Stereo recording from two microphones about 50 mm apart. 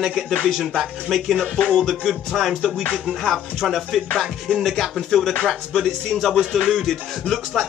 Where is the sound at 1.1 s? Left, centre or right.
Centre.